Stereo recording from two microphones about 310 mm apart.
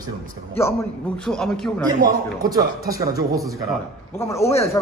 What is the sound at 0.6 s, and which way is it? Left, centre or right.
Speech, centre.